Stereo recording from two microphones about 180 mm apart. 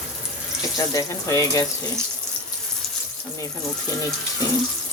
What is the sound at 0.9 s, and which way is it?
Speech, 20° left (ahead or behind).